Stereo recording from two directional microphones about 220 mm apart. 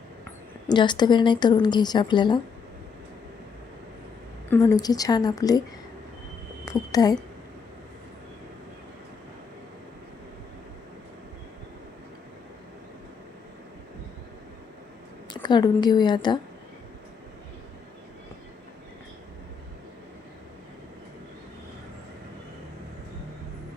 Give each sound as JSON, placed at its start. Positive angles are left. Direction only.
{"t": 0.7, "sound": "speech", "side_deg": 20}
{"t": 4.4, "sound": "a woman's voice", "side_deg": 15}
{"t": 6.7, "sound": "a woman's voice", "side_deg": 15}
{"t": 15.3, "sound": "speech", "side_deg": 20}